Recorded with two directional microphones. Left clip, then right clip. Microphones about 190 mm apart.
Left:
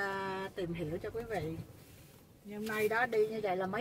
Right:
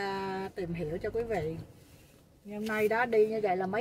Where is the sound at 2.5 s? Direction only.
25° right (ahead or behind).